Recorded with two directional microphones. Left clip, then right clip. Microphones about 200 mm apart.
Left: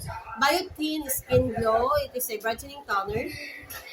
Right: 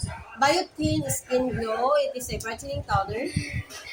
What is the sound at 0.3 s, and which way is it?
A woman's voice, 20° left (ahead or behind).